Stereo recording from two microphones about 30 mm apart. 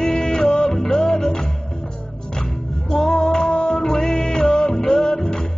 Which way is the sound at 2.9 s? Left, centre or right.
Left.